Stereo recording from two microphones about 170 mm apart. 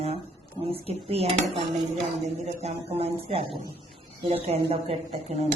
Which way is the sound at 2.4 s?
40° right (ahead or behind).